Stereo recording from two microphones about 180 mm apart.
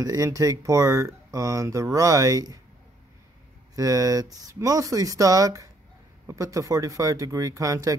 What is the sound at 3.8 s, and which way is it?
Speech, 20° right (ahead or behind).